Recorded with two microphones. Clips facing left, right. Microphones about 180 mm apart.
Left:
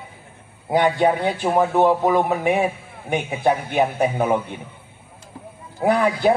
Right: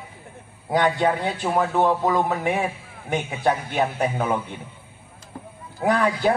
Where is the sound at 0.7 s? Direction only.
20° left (ahead or behind).